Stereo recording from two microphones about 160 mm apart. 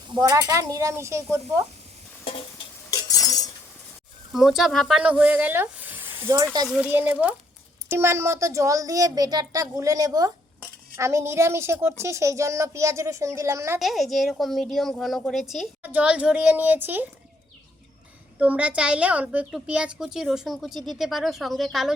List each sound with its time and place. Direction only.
0.1 s a woman's voice: 25° right (ahead or behind)
2.9 s chink: 25° left (ahead or behind)
4.3 s speech: centre (ahead or behind); by 6.7 s 25° right (ahead or behind)
6.7 s a woman's voice: 10° right (ahead or behind)
13.7 s a woman's voice: centre (ahead or behind)
18.3 s a woman's voice: 10° right (ahead or behind)